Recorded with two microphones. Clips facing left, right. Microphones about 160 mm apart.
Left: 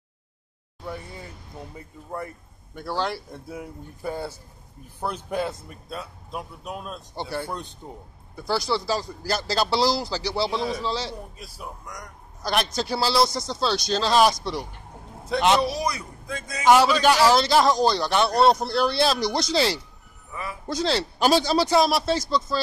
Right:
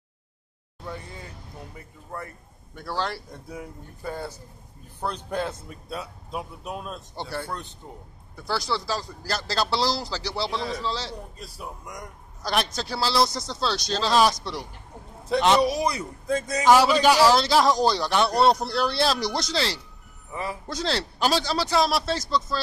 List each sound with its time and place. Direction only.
2.7 s speech: 5° left (ahead or behind)
11.8 s speech: 25° right (ahead or behind)
12.7 s speech: 10° left (ahead or behind)
15.8 s a man's voice: 35° right (ahead or behind)
17.0 s speech: 5° right (ahead or behind)
19.5 s speech: 15° left (ahead or behind)
21.2 s speech: 15° left (ahead or behind)